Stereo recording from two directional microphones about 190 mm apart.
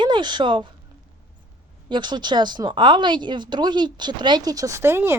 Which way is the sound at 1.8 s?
25° right (ahead or behind).